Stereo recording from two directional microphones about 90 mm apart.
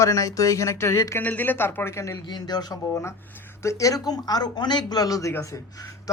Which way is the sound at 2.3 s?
50° left (ahead or behind).